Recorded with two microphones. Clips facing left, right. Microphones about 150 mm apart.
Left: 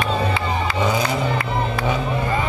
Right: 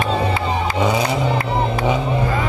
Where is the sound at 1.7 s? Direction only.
20° right (ahead or behind).